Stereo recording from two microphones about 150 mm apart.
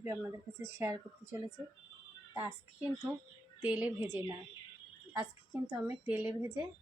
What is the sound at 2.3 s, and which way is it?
A woman's voice, 10° right (ahead or behind).